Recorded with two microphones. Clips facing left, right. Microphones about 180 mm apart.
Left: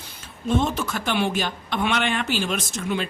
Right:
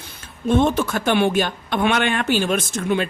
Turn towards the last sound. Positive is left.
turn(degrees=-55)  # may be behind; listen again after turning